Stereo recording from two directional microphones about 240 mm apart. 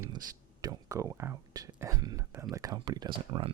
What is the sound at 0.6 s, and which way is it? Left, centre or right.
Speech, centre.